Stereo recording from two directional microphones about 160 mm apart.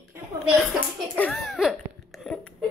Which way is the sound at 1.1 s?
5° left (ahead or behind).